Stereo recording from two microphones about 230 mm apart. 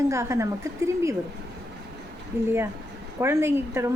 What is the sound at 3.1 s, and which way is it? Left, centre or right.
Speech, centre.